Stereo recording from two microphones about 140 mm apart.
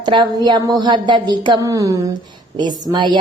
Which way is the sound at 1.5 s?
25° right (ahead or behind).